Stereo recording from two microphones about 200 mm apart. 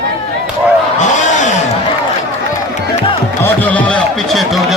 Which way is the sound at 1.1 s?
35° left (ahead or behind).